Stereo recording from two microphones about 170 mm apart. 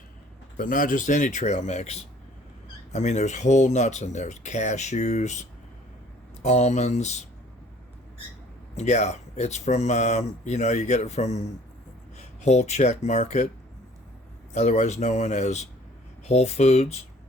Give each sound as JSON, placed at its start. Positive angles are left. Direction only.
{"t": 0.5, "sound": "speech", "side_deg": 50}
{"t": 8.7, "sound": "speech", "side_deg": 40}
{"t": 14.5, "sound": "speech", "side_deg": 40}